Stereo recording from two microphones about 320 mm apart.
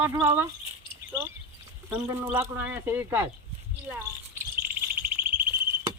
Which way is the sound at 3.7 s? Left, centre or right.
Centre.